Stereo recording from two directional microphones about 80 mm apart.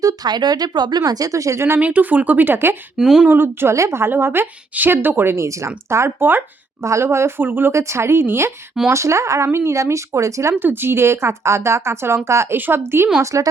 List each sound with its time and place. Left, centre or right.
0.0 s speech: right
1.8 s a woman's voice: centre
3.0 s speech: centre
3.2 s a woman's voice: right
6.8 s speech: right
7.7 s speech: right
10.6 s speech: right
13.3 s speech: right